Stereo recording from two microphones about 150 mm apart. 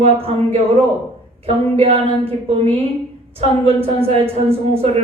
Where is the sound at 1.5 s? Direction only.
40° right (ahead or behind).